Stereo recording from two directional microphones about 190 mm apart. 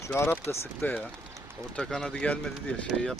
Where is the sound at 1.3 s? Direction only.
15° right (ahead or behind).